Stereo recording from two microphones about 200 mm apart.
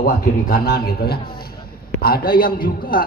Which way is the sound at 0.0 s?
50° left (ahead or behind).